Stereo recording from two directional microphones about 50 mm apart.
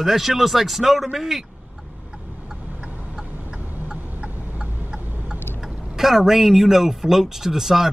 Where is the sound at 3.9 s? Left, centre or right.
Right.